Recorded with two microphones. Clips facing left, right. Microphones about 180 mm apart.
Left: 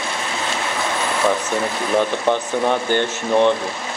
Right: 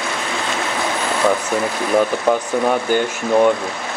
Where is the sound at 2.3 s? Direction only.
5° right (ahead or behind).